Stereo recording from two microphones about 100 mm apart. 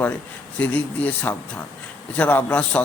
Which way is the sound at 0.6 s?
15° left (ahead or behind).